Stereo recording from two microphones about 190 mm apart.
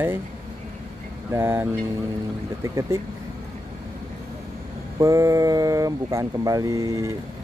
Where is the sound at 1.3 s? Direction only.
15° right (ahead or behind).